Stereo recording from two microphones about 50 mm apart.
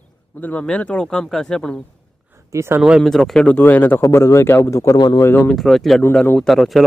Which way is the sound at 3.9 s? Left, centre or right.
Left.